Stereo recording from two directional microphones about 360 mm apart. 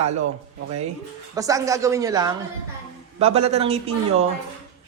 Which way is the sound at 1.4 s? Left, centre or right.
Centre.